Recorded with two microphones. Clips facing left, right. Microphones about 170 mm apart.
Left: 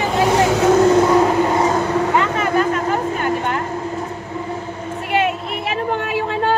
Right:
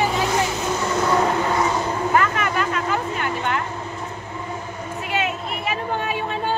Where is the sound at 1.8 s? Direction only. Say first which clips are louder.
Left 5 dB; 80° left.